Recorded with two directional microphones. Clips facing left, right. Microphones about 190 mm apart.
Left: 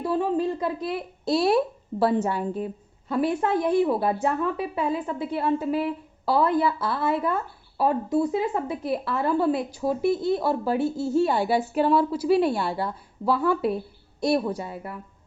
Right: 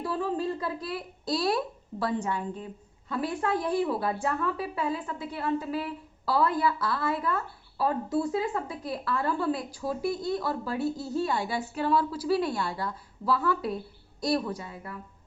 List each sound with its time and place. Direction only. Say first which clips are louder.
0.0 s a woman's voice: left 5 dB; 20° left (ahead or behind)
3.2 s a woman's voice: left 4 dB; 25° left (ahead or behind)